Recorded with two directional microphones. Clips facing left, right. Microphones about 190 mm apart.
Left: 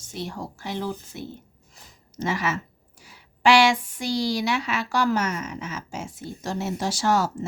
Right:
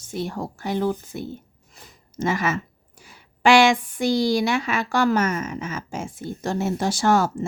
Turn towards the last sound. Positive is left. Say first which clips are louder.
# right 3 dB
turn(degrees=-55)  # may be behind; listen again after turning